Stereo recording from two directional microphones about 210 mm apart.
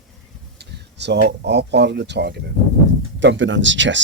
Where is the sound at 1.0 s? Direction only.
55° right (ahead or behind).